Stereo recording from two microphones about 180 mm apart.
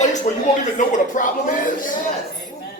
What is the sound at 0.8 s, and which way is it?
Speech, 45° left (ahead or behind).